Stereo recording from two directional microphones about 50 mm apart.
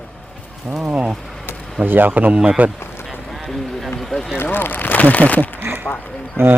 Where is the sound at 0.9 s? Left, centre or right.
Right.